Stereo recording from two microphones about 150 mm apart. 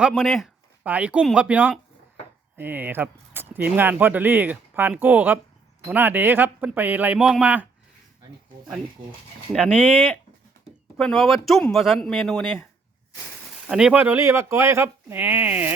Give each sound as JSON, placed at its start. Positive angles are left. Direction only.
{"t": 0.1, "sound": "speech", "side_deg": 0}
{"t": 10.9, "sound": "speech", "side_deg": 5}
{"t": 13.7, "sound": "speech", "side_deg": -5}